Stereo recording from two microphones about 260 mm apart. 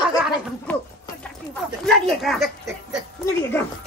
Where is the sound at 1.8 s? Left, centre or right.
Centre.